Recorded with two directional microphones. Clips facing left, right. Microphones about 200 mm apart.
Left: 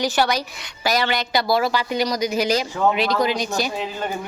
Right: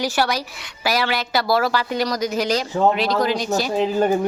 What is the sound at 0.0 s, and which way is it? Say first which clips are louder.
A woman's voice: left 1 dB; 5° right (ahead or behind).